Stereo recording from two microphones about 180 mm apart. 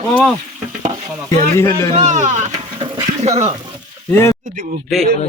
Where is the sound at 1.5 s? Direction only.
15° left (ahead or behind).